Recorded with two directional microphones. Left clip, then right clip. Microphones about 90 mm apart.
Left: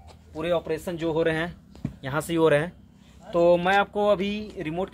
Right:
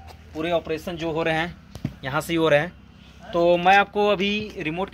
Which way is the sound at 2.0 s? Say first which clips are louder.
Right 1 dB; 55° left (ahead or behind).